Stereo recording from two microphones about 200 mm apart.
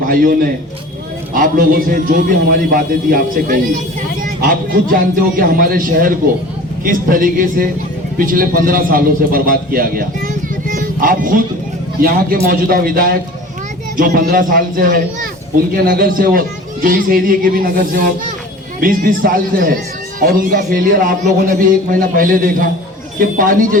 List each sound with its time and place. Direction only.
0.0 s a man's voice: 45° right (ahead or behind)
10.7 s music: 45° right (ahead or behind)
12.0 s a man's voice: 45° right (ahead or behind)